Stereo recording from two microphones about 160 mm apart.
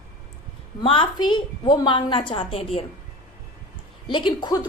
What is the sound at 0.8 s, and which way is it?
A woman's voice, 30° left (ahead or behind).